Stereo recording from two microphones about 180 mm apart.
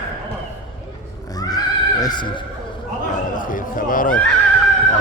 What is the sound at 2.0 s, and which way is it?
Speech, 25° left (ahead or behind).